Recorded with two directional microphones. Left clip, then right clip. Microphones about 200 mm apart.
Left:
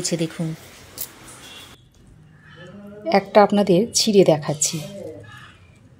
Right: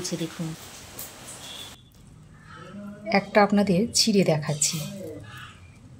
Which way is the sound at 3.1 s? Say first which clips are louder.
Left 6 dB; 35° left (ahead or behind).